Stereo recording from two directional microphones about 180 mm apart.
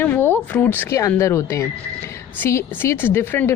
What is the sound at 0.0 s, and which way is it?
Speech, 10° left (ahead or behind).